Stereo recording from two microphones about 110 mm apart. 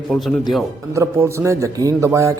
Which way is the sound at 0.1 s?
Centre (ahead or behind).